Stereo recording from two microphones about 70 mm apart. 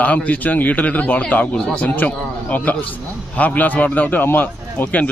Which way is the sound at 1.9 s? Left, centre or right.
Left.